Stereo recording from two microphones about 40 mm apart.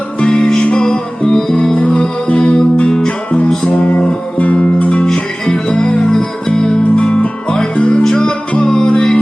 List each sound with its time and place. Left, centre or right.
0.2 s music: left
3.7 s music: left
5.1 s music: centre